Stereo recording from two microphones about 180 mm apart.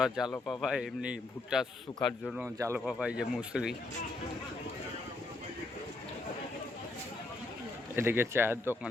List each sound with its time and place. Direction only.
0.0 s a man's voice: 5° right (ahead or behind)
2.6 s speech: 15° right (ahead or behind)
2.8 s a man's voice: 5° right (ahead or behind)
7.9 s speech: 15° right (ahead or behind)